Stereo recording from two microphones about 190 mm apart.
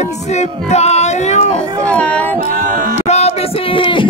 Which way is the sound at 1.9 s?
5° left (ahead or behind).